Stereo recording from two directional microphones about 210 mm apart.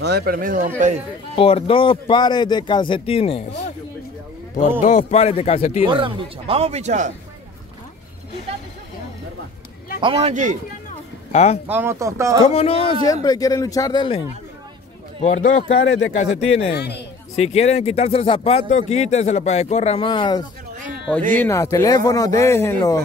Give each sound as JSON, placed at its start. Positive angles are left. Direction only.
{"t": 0.0, "sound": "speech", "side_deg": -50}
{"t": 1.3, "sound": "speech", "side_deg": 25}
{"t": 4.8, "sound": "speech", "side_deg": 35}
{"t": 5.9, "sound": "speech", "side_deg": -25}
{"t": 10.0, "sound": "speech", "side_deg": -25}
{"t": 11.3, "sound": "speech", "side_deg": 30}
{"t": 11.6, "sound": "speech", "side_deg": -10}
{"t": 12.4, "sound": "speech", "side_deg": 30}
{"t": 15.2, "sound": "speech", "side_deg": 35}
{"t": 16.7, "sound": "speech", "side_deg": 50}
{"t": 17.4, "sound": "speech", "side_deg": 30}